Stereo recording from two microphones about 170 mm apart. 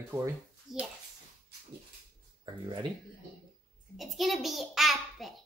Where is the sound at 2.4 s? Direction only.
25° right (ahead or behind).